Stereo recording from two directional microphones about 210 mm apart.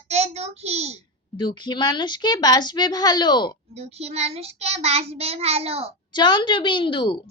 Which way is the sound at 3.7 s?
30° right (ahead or behind).